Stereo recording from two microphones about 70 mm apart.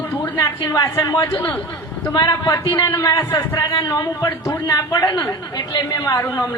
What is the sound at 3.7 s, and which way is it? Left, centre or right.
Speech, left.